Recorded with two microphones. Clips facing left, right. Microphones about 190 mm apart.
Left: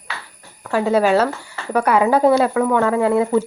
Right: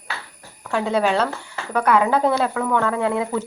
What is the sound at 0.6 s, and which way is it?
A woman's voice, 5° left (ahead or behind).